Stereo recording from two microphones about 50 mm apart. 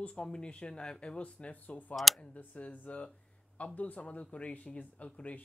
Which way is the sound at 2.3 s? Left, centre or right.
Left.